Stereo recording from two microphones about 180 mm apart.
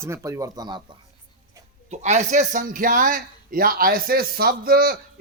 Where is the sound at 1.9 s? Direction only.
40° right (ahead or behind).